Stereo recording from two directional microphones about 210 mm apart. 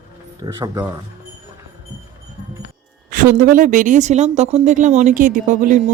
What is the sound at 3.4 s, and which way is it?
Speech, 40° right (ahead or behind).